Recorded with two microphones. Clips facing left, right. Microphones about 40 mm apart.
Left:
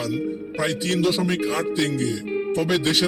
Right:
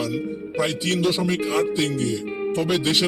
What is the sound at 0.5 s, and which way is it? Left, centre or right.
Speech, centre.